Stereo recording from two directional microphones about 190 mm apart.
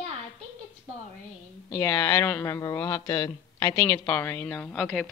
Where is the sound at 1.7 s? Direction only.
20° left (ahead or behind); by 5.1 s 5° left (ahead or behind).